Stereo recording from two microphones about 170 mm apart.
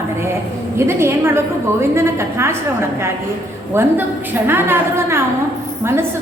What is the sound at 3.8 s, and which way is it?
A woman's voice, 15° right (ahead or behind).